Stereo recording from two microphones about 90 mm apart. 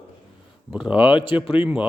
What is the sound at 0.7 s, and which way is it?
Speech, 10° right (ahead or behind).